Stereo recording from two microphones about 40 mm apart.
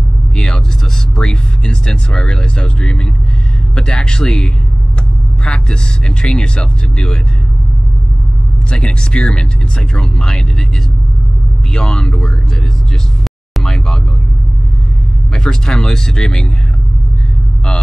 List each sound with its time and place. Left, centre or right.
1.1 s speech: centre
8.6 s speech: left
11.7 s speech: centre
13.2 s vehicle: centre
15.3 s speech: centre